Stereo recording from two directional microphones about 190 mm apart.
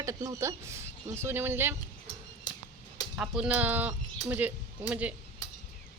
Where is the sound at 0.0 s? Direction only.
15° right (ahead or behind).